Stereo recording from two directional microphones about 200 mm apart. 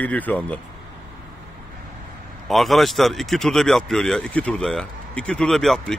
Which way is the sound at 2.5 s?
Centre (ahead or behind).